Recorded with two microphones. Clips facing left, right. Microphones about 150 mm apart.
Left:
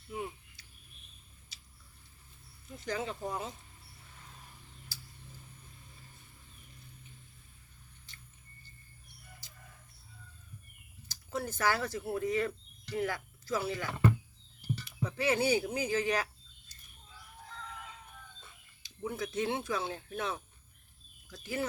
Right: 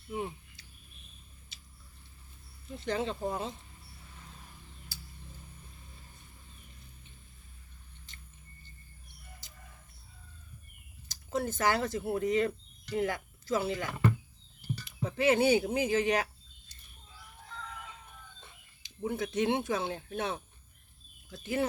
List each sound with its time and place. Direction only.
0.1 s a sound: 30° right (ahead or behind)
2.7 s speech: 25° right (ahead or behind)
8.1 s drip: 20° right (ahead or behind)
11.1 s speech: 20° right (ahead or behind)
14.8 s speech: 20° right (ahead or behind)
18.3 s speech: 25° right (ahead or behind)